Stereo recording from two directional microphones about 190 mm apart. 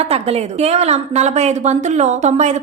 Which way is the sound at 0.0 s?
35° right (ahead or behind).